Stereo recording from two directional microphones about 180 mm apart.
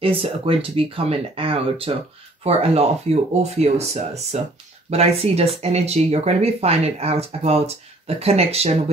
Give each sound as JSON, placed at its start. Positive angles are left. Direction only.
{"t": 0.0, "sound": "speech", "side_deg": -30}